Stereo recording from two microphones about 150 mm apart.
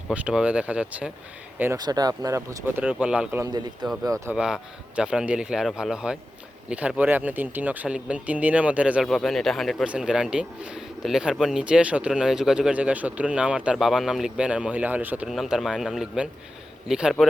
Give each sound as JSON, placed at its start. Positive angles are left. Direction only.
{"t": 0.1, "sound": "speech", "side_deg": -10}
{"t": 1.8, "sound": "speech", "side_deg": -25}
{"t": 3.4, "sound": "speech", "side_deg": -30}
{"t": 4.3, "sound": "a man's voice", "side_deg": -5}